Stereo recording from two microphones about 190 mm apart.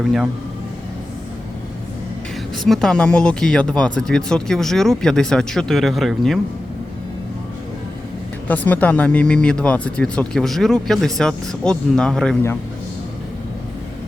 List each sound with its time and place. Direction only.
0.0 s speech: 5° right (ahead or behind)
2.6 s speech: 5° left (ahead or behind)
8.4 s speech: 10° left (ahead or behind)